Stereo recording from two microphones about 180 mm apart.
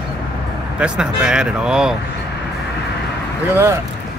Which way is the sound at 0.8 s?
5° right (ahead or behind).